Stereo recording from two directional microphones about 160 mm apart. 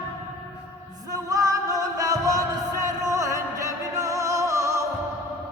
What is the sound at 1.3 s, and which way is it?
Music, 20° right (ahead or behind).